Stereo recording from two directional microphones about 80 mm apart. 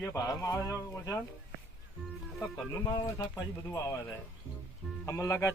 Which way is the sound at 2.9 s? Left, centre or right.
Left.